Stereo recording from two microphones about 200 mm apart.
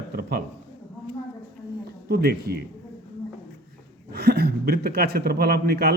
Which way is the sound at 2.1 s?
50° right (ahead or behind).